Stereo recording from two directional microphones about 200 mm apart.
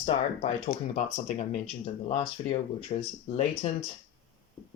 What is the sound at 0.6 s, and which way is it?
Speech, 30° left (ahead or behind).